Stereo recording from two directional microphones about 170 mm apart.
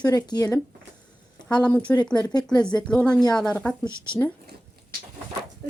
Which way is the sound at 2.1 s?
25° left (ahead or behind).